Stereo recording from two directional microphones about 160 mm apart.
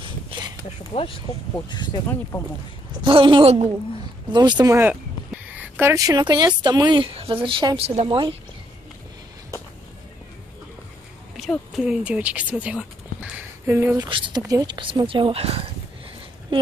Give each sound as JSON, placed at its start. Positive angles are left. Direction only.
{"t": 0.0, "sound": "a sound", "side_deg": -30}
{"t": 2.3, "sound": "speech", "side_deg": 15}
{"t": 3.0, "sound": "speech", "side_deg": -35}
{"t": 4.3, "sound": "speech", "side_deg": -25}
{"t": 4.7, "sound": "speech", "side_deg": -10}
{"t": 11.3, "sound": "speech", "side_deg": 0}
{"t": 13.9, "sound": "speech", "side_deg": -30}